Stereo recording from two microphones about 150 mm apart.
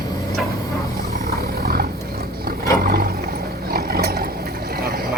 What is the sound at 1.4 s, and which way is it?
Roaring cats, 90° right.